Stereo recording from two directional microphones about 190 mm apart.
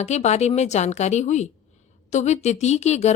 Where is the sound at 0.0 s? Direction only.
35° left (ahead or behind).